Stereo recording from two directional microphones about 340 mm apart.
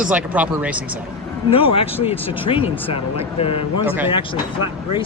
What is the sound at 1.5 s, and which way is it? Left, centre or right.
Speech, centre.